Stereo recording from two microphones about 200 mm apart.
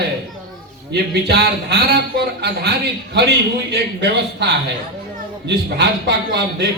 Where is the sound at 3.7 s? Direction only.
55° right (ahead or behind).